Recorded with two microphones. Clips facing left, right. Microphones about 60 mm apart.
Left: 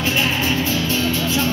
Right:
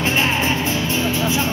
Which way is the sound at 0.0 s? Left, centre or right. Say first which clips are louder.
Right 1 dB; right.